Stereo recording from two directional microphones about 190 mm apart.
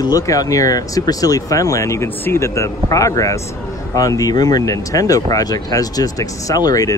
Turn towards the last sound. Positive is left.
turn(degrees=20)  # may be behind; listen again after turning